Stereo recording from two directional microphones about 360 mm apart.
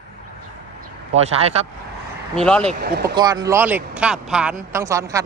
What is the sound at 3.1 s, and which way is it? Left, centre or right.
Speech, centre.